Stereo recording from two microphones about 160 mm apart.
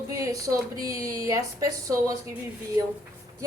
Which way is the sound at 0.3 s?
20° right (ahead or behind).